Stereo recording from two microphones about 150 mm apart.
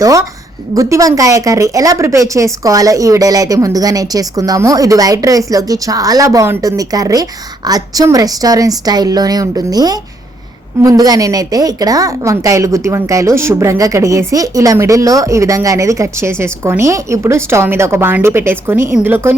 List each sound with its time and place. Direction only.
0.0 s a woman's voice: 20° right (ahead or behind)